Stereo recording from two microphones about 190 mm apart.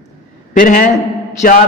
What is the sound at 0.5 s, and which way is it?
Speech, 45° left (ahead or behind).